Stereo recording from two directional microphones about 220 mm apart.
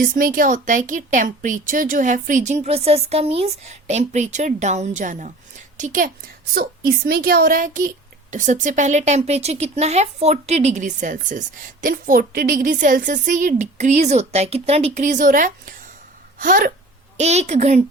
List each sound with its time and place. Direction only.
0.0 s a woman's voice: 40° right (ahead or behind)